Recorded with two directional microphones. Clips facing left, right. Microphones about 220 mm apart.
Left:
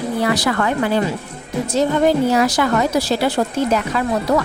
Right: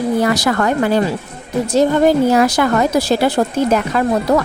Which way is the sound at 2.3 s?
55° right (ahead or behind).